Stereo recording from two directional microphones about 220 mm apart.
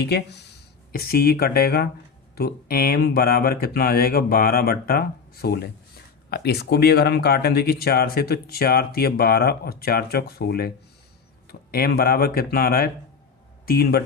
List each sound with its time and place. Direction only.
0.0 s speech: 50° left (ahead or behind)